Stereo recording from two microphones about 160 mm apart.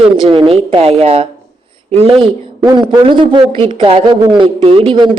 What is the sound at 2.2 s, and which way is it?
A man's voice, 30° right (ahead or behind).